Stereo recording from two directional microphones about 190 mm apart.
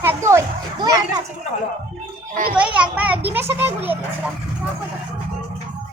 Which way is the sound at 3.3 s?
10° right (ahead or behind).